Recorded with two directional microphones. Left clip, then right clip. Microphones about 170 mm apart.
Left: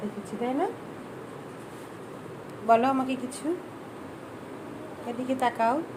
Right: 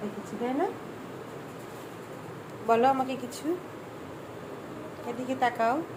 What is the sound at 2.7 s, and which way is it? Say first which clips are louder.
Speech: left 1 dB; 10° left (ahead or behind).